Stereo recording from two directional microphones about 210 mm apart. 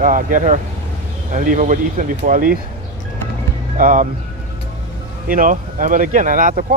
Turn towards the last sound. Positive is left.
turn(degrees=-40)  # may be behind; listen again after turning